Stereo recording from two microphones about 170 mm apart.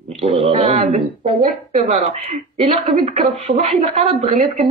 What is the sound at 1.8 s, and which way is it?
A woman's voice, 35° right (ahead or behind).